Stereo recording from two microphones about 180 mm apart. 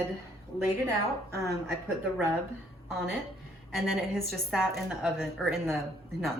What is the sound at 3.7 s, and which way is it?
A woman's voice, centre (ahead or behind).